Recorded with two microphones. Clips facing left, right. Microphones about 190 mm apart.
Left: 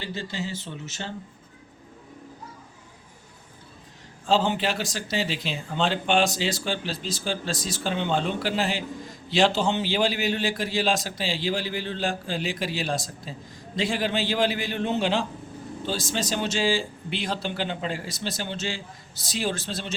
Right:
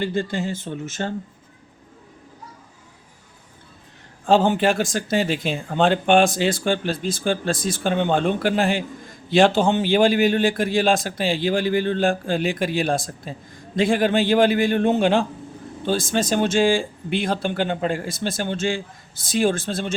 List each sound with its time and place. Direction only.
0.0 s speech: 50° right (ahead or behind)
4.3 s speech: 50° right (ahead or behind)